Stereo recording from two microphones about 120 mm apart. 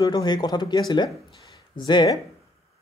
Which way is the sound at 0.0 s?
35° left (ahead or behind).